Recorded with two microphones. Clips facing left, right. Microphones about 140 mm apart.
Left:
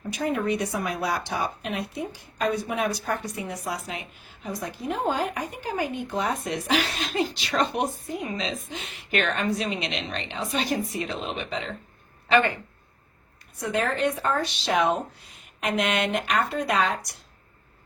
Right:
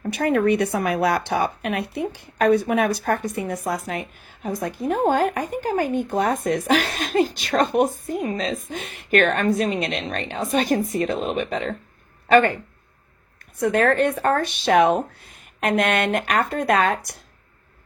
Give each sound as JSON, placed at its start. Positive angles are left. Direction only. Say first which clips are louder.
{"t": 0.1, "sound": "speech", "louder": "right 7 dB", "side_deg": -65}
{"t": 13.6, "sound": "speech", "louder": "right 7 dB", "side_deg": -55}